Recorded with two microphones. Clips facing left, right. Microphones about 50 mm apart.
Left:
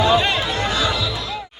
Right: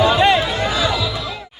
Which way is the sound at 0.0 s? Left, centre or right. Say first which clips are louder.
Right 3 dB; centre.